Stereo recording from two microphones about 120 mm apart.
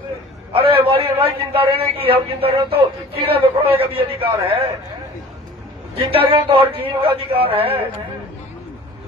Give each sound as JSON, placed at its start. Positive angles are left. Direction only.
{"t": 0.5, "sound": "a man's voice", "side_deg": -50}
{"t": 5.9, "sound": "a man's voice", "side_deg": -50}